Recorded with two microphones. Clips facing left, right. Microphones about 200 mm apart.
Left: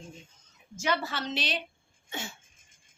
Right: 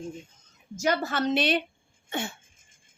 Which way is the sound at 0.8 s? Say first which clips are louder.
Right 5 dB; 45° right (ahead or behind).